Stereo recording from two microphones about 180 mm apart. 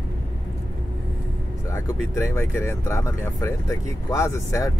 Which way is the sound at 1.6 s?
15° left (ahead or behind).